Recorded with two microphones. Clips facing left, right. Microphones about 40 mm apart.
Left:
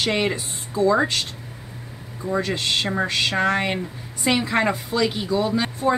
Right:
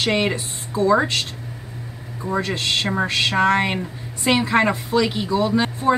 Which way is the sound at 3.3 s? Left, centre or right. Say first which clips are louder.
Right 5 dB; centre.